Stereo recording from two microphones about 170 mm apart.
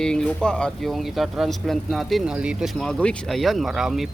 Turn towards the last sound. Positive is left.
turn(degrees=0)  # may be behind; listen again after turning